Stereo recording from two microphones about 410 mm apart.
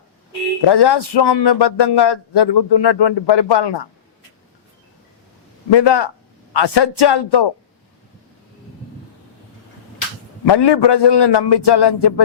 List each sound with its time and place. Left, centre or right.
0.7 s speech: left
5.7 s speech: left
10.4 s speech: left